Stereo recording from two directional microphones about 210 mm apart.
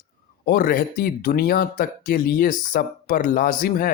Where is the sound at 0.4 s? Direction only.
45° left (ahead or behind).